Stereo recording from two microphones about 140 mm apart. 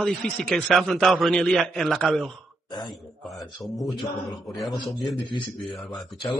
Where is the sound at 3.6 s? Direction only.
Centre (ahead or behind).